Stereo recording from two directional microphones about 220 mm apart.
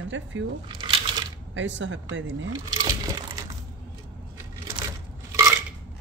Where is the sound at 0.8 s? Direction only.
20° right (ahead or behind).